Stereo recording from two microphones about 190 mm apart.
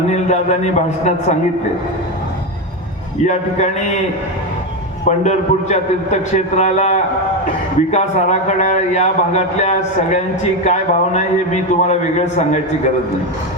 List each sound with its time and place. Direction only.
0.1 s a man's voice: 40° left (ahead or behind)
3.2 s a man's voice: 40° left (ahead or behind)
5.0 s a man's voice: 40° left (ahead or behind)